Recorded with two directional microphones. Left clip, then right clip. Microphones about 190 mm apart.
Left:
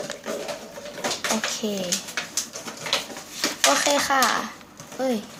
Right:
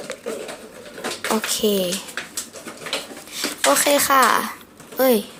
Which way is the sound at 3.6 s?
35° right (ahead or behind).